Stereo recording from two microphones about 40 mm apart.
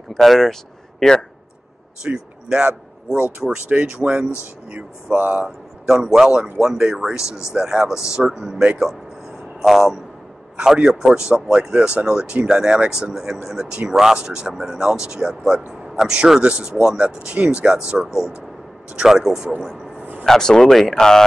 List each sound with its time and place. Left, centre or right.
0.1 s speech: centre
2.0 s speech: centre
3.4 s speech: centre
3.9 s speech: right
4.7 s speech: right
5.9 s speech: centre
9.6 s speech: centre
10.6 s speech: centre
13.8 s speech: centre
14.1 s speech: right
14.5 s speech: centre
16.3 s speech: right
19.0 s speech: centre
20.2 s speech: centre